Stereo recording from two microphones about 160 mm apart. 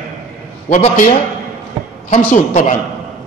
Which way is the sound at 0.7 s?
50° left (ahead or behind).